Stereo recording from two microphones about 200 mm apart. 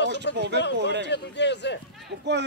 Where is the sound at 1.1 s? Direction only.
60° left (ahead or behind).